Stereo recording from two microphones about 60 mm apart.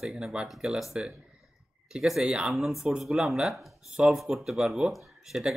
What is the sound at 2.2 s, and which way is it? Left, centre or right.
Speech, centre.